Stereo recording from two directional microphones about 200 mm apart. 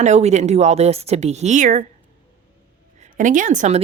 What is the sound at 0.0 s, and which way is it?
A woman's voice, 35° right (ahead or behind).